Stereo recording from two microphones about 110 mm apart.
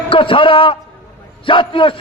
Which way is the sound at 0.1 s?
50° left (ahead or behind).